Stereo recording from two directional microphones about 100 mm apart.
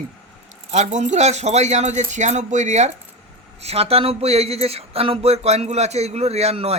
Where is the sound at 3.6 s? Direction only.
90° right.